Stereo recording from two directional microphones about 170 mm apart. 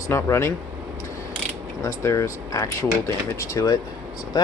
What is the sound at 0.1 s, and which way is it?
Speech, 15° left (ahead or behind).